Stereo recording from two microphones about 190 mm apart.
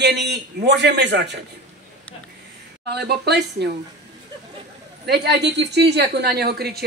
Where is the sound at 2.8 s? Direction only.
60° right (ahead or behind).